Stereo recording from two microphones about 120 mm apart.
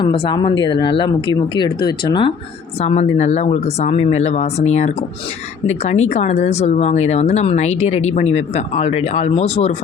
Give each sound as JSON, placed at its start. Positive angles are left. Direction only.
{"t": 0.0, "sound": "speech", "side_deg": 45}
{"t": 2.8, "sound": "speech", "side_deg": 65}